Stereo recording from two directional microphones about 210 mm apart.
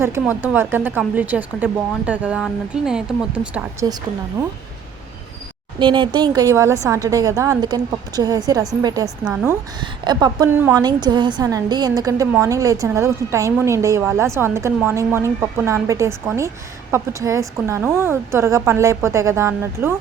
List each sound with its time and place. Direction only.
0.0 s a woman's voice: 10° right (ahead or behind)
5.8 s a woman's voice: 20° right (ahead or behind)
9.0 s a woman's voice: 5° right (ahead or behind)
10.0 s a woman's voice: 20° right (ahead or behind)